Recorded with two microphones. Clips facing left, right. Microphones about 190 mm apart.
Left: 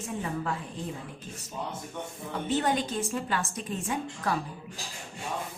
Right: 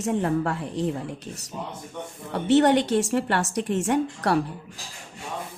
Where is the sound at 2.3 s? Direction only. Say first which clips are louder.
Right 9 dB; 75° right (ahead or behind).